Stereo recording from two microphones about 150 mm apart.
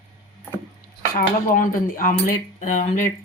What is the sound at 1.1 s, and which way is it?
Speech, 65° left (ahead or behind).